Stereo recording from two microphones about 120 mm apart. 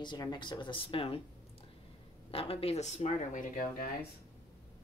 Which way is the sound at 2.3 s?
50° left (ahead or behind).